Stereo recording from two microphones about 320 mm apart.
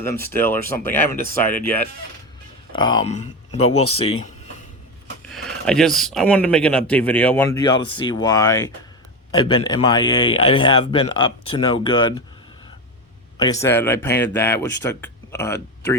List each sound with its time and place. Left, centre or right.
0.0 s a man's voice: centre
5.3 s a man's voice: centre
13.4 s a man's voice: centre